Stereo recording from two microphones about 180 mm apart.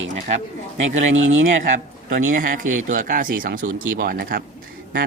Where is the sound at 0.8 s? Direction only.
90° right.